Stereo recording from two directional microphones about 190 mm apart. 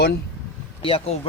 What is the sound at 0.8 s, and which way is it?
Speech, 30° left (ahead or behind).